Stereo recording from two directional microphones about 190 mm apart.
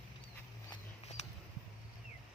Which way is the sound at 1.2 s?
35° left (ahead or behind).